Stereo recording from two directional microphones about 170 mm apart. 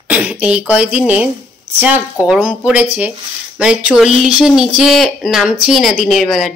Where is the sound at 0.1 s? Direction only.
5° right (ahead or behind).